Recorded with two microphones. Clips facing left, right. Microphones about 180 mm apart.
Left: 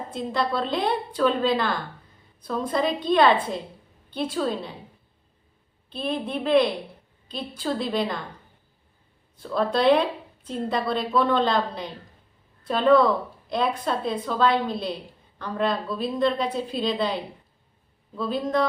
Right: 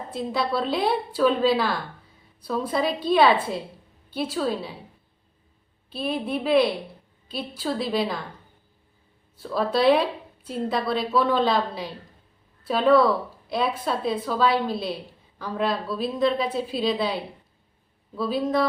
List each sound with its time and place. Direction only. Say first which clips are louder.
0.1 s a woman's voice: right 1 dB; 5° right (ahead or behind)
5.9 s a woman's voice: right 1 dB; 5° right (ahead or behind)
9.4 s a woman's voice: even; 5° right (ahead or behind)